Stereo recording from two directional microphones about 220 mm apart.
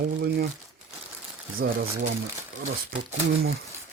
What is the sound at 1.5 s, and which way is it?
Speech, 40° right (ahead or behind).